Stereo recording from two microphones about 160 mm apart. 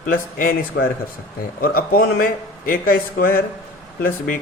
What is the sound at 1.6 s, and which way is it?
A man's voice, 65° left (ahead or behind).